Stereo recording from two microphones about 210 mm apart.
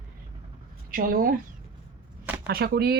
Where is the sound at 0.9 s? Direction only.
40° right (ahead or behind).